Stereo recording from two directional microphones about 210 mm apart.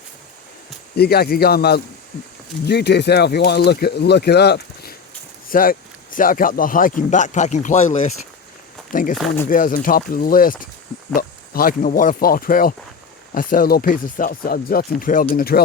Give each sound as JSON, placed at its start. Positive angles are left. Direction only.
{"t": 0.9, "sound": "speech", "side_deg": 50}
{"t": 9.1, "sound": "speech", "side_deg": 5}
{"t": 9.5, "sound": "speech", "side_deg": 40}